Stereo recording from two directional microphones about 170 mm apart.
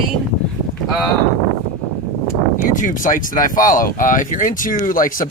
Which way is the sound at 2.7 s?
50° left (ahead or behind).